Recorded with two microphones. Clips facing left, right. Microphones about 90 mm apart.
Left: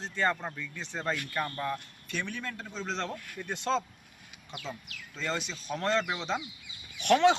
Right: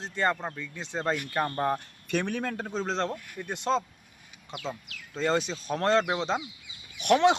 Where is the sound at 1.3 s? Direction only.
35° right (ahead or behind).